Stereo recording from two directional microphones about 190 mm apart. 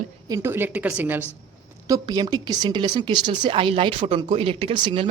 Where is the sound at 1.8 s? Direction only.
20° right (ahead or behind).